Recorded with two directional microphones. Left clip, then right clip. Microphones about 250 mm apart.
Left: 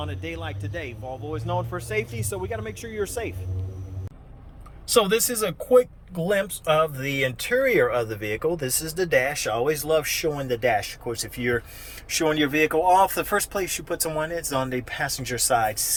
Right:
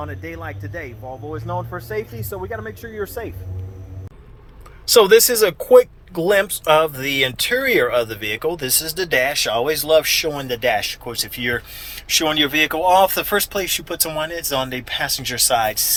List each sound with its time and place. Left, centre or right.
0.6 s speech: centre
1.0 s speech: right
4.9 s speech: centre